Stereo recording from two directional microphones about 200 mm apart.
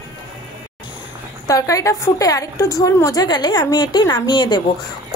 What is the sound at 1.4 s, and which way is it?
A woman's voice, 15° left (ahead or behind).